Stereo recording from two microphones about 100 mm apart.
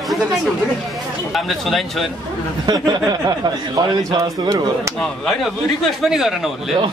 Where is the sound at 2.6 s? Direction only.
40° right (ahead or behind).